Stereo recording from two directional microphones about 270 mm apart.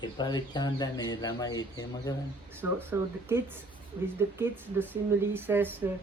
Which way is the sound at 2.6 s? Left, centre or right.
Centre.